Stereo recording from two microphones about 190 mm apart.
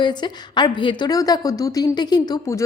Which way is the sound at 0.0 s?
25° left (ahead or behind).